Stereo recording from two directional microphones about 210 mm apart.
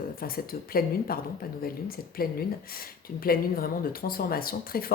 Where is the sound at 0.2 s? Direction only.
45° left (ahead or behind).